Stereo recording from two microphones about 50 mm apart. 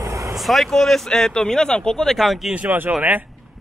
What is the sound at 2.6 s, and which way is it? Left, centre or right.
Speech, right.